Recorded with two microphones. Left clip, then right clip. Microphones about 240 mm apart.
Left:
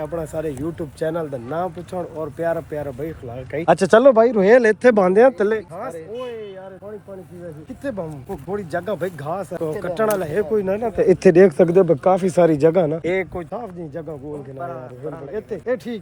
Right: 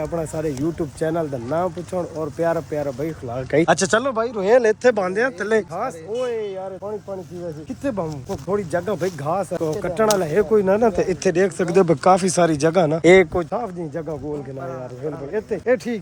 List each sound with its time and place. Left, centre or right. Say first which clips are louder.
0.0 s speech: right 1 dB; centre
4.0 s speech: left 9 dB; left
5.8 s speech: right 4 dB; centre
7.9 s speech: right 2 dB; centre
11.1 s speech: left 7 dB; left
11.7 s speech: even; centre
13.1 s speech: right 9 dB; right
13.5 s speech: right 4 dB; centre
15.3 s speech: right 4 dB; centre